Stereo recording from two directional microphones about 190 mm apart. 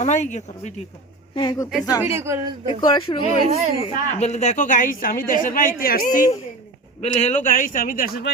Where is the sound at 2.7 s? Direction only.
25° left (ahead or behind).